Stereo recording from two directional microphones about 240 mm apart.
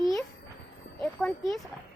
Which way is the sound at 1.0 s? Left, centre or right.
Centre.